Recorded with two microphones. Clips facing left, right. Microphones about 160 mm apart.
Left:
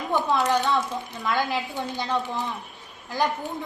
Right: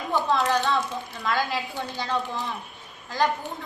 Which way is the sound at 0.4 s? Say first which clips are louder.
Left 1 dB; 20° left (ahead or behind).